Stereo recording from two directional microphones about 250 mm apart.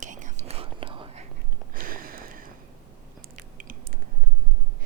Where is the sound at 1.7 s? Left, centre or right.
Right.